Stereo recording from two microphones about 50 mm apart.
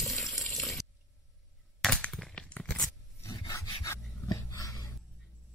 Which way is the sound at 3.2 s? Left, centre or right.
Left.